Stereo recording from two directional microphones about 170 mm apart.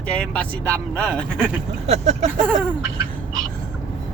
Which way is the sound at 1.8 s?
40° right (ahead or behind).